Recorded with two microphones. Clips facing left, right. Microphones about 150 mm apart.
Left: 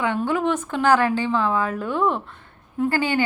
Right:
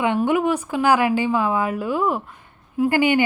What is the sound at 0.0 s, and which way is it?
Speech, 15° right (ahead or behind).